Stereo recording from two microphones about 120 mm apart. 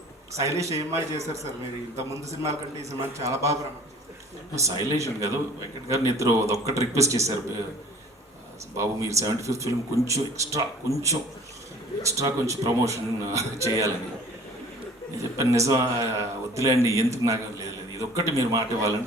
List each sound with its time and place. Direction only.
0.3 s speech: 25° right (ahead or behind)
8.8 s speech: 25° right (ahead or behind)
15.4 s speech: 25° right (ahead or behind)